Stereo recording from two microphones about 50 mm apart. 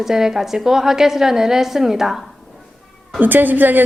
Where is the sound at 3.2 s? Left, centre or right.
Right.